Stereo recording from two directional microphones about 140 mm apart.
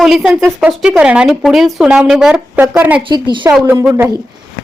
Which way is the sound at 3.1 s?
35° right (ahead or behind).